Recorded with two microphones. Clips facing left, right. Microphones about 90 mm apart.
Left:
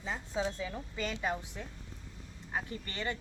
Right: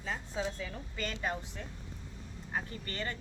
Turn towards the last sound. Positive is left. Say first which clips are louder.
# left 1 dB
turn(degrees=20)  # may be behind; listen again after turning